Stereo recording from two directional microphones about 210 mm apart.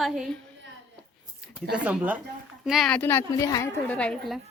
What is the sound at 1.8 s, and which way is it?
A woman's voice, 5° right (ahead or behind).